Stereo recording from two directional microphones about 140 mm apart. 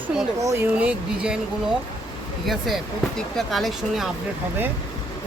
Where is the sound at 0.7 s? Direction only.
10° right (ahead or behind).